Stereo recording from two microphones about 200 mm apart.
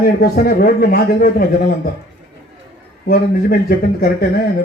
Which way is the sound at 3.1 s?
50° left (ahead or behind).